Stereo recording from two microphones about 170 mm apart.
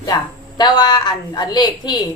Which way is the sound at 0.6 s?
25° left (ahead or behind).